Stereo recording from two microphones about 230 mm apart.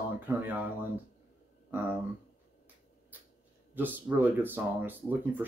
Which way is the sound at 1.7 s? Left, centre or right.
Centre.